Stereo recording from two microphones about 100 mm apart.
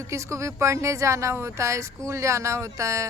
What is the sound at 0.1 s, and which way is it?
A woman's voice, 30° right (ahead or behind).